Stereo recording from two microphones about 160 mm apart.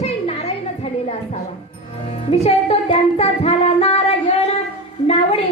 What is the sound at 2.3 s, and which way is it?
Music, 40° left (ahead or behind).